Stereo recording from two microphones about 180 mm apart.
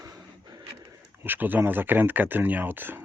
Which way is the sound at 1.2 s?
10° right (ahead or behind).